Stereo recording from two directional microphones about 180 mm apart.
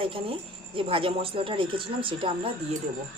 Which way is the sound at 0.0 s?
30° right (ahead or behind).